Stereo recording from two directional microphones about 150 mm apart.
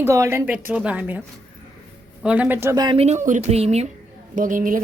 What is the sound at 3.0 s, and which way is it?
Speech, 50° right (ahead or behind).